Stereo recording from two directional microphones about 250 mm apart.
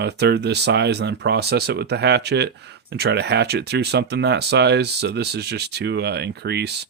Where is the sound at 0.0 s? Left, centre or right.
Right.